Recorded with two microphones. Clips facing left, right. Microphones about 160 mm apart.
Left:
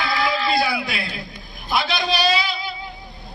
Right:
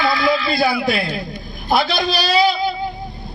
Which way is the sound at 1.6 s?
40° right (ahead or behind).